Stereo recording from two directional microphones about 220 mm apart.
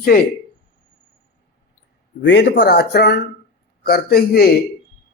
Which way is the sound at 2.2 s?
55° left (ahead or behind).